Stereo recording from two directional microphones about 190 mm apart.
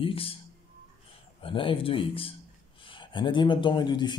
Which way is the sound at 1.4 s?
30° left (ahead or behind).